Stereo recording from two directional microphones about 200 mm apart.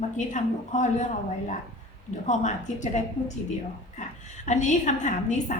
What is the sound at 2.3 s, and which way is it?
A woman's voice, 35° left (ahead or behind).